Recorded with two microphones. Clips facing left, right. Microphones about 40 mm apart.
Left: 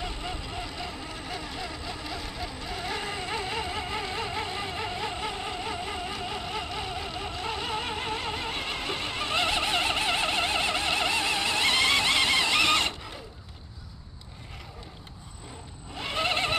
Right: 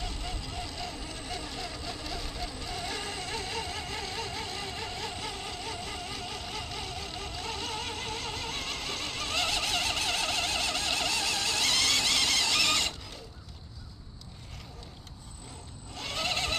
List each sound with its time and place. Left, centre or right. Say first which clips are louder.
0.0 s vehicle: left 4 dB; centre
15.9 s neigh: left 5 dB; left